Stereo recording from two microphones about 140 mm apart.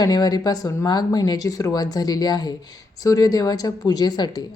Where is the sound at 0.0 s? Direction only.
30° left (ahead or behind).